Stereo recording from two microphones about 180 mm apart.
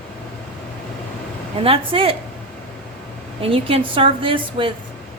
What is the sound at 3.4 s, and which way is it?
A woman's voice, 30° right (ahead or behind).